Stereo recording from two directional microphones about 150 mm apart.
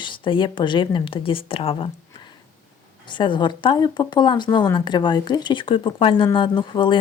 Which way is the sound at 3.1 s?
30° left (ahead or behind).